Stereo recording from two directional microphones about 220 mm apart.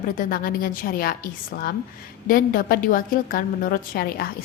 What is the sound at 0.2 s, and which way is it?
A woman's voice, 40° left (ahead or behind).